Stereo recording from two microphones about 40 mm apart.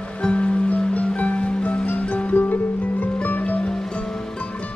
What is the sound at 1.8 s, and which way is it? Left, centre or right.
Music, left.